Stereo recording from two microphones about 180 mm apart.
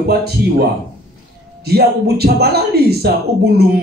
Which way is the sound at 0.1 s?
60° right (ahead or behind).